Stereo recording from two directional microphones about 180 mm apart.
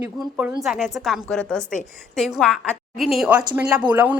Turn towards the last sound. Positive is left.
turn(degrees=-10)  # may be behind; listen again after turning